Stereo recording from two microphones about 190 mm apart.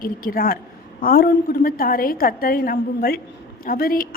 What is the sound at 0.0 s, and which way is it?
A woman's voice, 50° left (ahead or behind).